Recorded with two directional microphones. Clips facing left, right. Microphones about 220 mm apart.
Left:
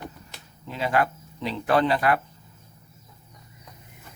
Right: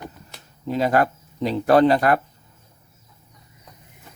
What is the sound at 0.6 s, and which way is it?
Speech, 40° right (ahead or behind).